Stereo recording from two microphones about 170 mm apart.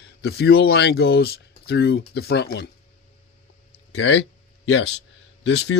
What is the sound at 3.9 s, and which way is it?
Speech, 90° left.